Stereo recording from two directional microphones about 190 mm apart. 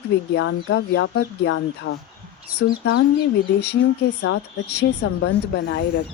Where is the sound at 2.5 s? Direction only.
60° left (ahead or behind).